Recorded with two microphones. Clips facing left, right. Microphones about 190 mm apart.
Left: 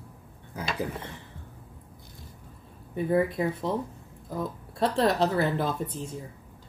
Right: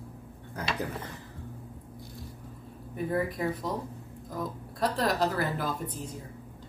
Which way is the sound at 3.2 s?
25° left (ahead or behind).